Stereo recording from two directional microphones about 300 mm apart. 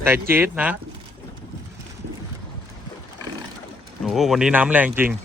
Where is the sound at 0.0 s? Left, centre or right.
Centre.